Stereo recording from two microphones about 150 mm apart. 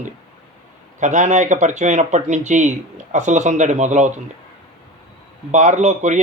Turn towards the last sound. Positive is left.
turn(degrees=-50)  # may be behind; listen again after turning